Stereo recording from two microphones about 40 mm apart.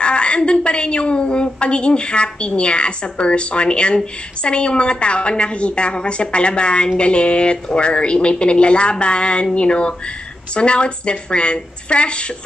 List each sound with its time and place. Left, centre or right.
0.0 s a woman's voice: left